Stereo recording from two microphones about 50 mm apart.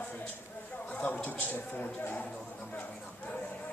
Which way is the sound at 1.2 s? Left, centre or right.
Left.